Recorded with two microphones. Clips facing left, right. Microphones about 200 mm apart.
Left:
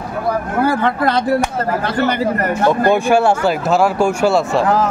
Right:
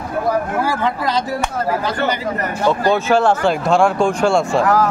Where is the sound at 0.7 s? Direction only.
60° left (ahead or behind).